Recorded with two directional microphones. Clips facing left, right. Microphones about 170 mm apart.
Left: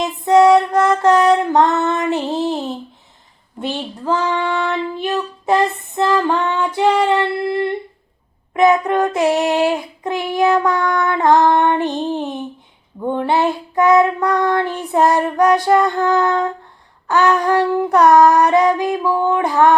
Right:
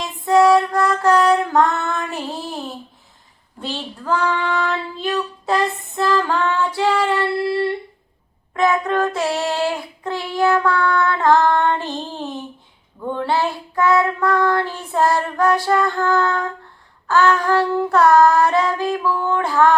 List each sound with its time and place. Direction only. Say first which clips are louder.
0.0 s female singing: left 3 dB; 20° left (ahead or behind)
3.6 s child singing: left 5 dB; 20° left (ahead or behind)